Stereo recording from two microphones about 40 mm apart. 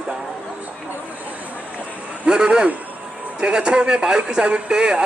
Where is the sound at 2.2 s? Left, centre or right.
Right.